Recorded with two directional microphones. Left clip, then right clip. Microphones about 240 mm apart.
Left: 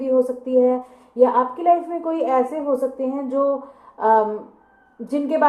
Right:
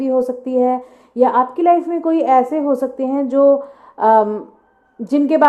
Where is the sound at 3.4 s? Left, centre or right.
Right.